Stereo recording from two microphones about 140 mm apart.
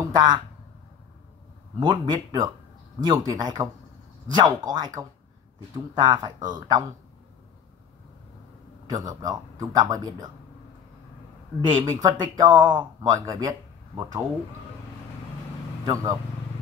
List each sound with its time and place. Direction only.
0.0 s a sound: 30° right (ahead or behind)
1.8 s speech: 30° right (ahead or behind)
8.8 s speech: 25° right (ahead or behind)
11.7 s speech: 25° right (ahead or behind)
15.8 s speech: 30° right (ahead or behind)